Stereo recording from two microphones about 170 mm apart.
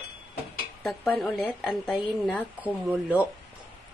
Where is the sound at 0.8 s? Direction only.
Centre (ahead or behind).